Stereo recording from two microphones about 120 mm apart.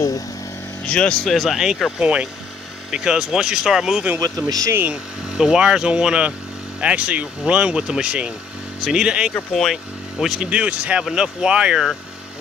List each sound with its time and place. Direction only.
0.8 s speech: 10° left (ahead or behind)
4.5 s speech: 30° right (ahead or behind)
5.4 s speech: 5° right (ahead or behind)